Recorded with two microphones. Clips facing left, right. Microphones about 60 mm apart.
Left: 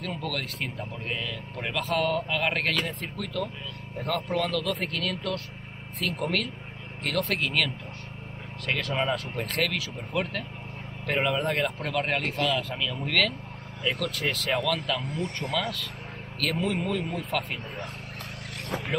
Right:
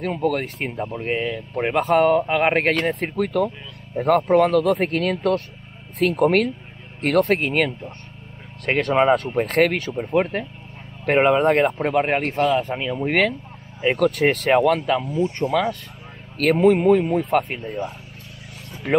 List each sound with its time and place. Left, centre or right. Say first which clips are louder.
0.0 s speech: right 10 dB; right
2.7 s speech: right 9 dB; right
9.9 s speech: right 9 dB; right
13.7 s speech: right 11 dB; right
15.0 s speech: right 10 dB; left
16.3 s speech: right 12 dB; right
17.6 s speech: right 9 dB; left